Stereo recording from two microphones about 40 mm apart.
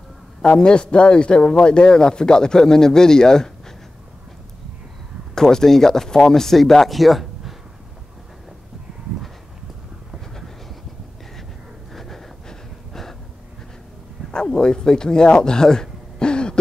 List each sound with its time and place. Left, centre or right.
0.4 s a man's voice: left
5.3 s speech: centre
11.9 s a sound: centre
14.3 s speech: centre